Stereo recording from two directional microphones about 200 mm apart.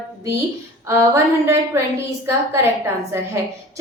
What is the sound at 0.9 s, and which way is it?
A woman's voice, 15° right (ahead or behind).